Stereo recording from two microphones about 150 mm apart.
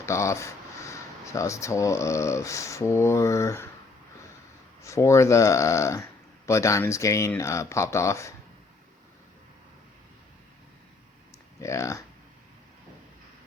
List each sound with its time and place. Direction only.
0.0 s speech: 20° left (ahead or behind)
4.8 s speech: 20° left (ahead or behind)
11.6 s speech: 20° left (ahead or behind)